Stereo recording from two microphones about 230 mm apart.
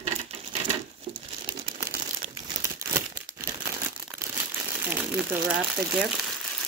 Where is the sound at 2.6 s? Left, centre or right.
Centre.